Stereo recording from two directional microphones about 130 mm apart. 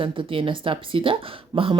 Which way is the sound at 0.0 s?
40° right (ahead or behind).